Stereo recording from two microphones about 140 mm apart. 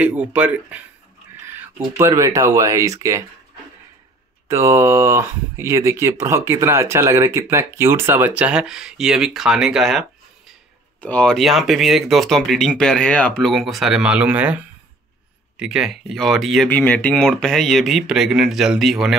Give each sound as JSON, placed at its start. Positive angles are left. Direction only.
{"t": 0.0, "sound": "speech", "side_deg": -10}
{"t": 2.0, "sound": "speech", "side_deg": -20}
{"t": 4.5, "sound": "speech", "side_deg": -20}
{"t": 11.0, "sound": "speech", "side_deg": 10}
{"t": 16.6, "sound": "speech", "side_deg": 10}